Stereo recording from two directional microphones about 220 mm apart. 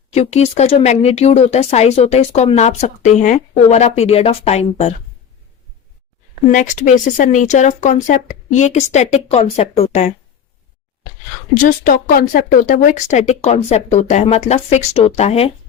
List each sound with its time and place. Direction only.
0.1 s speech: 30° left (ahead or behind)
6.5 s speech: 35° left (ahead or behind)
11.5 s speech: 40° left (ahead or behind)